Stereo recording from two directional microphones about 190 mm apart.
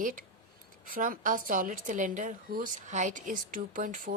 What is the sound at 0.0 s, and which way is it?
A woman's voice, 45° right (ahead or behind).